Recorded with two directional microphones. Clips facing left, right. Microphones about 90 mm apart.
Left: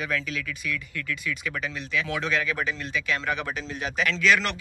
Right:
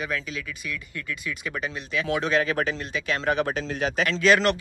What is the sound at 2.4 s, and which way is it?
Speech, 45° right (ahead or behind).